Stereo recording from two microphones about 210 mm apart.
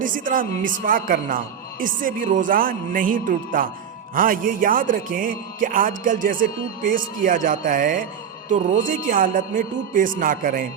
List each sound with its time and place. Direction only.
0.0 s speech: 40° right (ahead or behind)